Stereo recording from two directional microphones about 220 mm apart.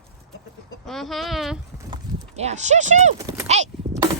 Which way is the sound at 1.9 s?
30° right (ahead or behind).